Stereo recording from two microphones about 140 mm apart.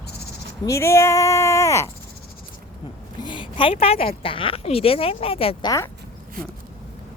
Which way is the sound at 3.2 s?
35° left (ahead or behind).